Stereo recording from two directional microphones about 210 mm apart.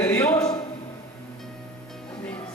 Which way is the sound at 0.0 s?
10° left (ahead or behind).